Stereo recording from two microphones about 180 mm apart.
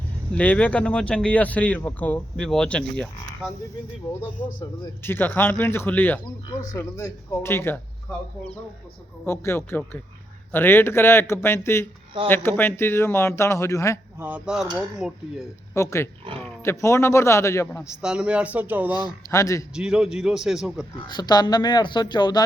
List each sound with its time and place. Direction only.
0.3 s speech: 10° left (ahead or behind)
5.0 s speech: 10° left (ahead or behind)
9.2 s speech: 15° left (ahead or behind)
14.2 s a man's voice: 10° right (ahead or behind)
15.7 s speech: 15° left (ahead or behind)
16.3 s speech: 30° right (ahead or behind)
16.6 s speech: 15° left (ahead or behind)
17.8 s speech: 5° right (ahead or behind)
18.9 s speech: 20° left (ahead or behind)
19.7 s a man's voice: 5° right (ahead or behind)
21.1 s a woman's voice: 25° left (ahead or behind)